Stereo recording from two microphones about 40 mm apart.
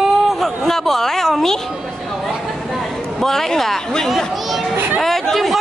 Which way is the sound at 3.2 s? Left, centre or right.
Centre.